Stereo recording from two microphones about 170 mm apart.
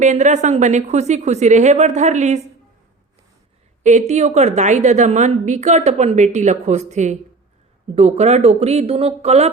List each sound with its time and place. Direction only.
0.0 s a woman's voice: 45° right (ahead or behind)
3.8 s a woman's voice: 45° right (ahead or behind)